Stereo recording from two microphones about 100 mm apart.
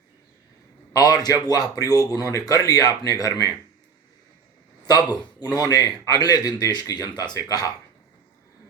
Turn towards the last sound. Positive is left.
turn(degrees=40)  # may be behind; listen again after turning